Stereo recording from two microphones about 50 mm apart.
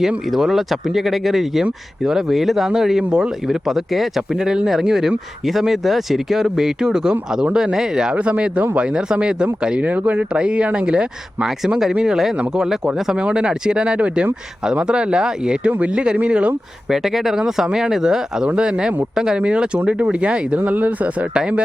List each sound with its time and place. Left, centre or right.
0.3 s speech: centre
8.1 s speech: right
10.3 s speech: right
13.1 s speech: centre
16.9 s speech: centre; by 21.2 s right
21.3 s speech: centre